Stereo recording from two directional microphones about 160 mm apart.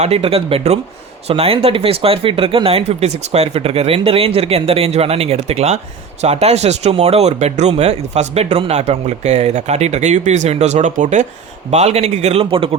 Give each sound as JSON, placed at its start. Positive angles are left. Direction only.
{"t": 0.0, "sound": "speech", "side_deg": -40}